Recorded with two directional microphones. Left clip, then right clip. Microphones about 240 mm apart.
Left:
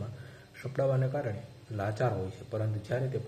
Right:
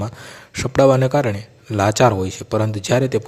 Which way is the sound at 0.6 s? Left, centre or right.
Right.